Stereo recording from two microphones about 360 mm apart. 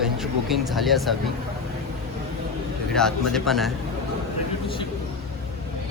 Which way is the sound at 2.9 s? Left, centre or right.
Centre.